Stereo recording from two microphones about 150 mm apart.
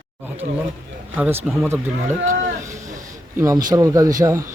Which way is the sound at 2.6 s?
20° right (ahead or behind).